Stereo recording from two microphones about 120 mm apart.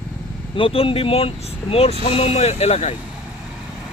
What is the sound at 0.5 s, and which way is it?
Speech, 50° left (ahead or behind).